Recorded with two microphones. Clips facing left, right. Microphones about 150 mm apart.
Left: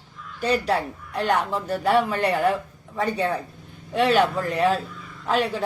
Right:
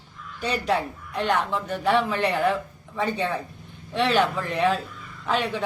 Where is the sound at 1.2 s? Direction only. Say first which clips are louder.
Left 1 dB; 40° left (ahead or behind).